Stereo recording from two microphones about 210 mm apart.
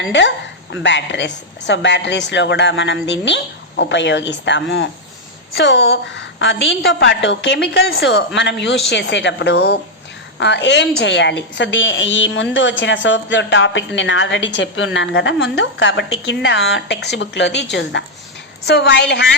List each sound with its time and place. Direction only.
0.1 s a woman's voice: 60° left (ahead or behind)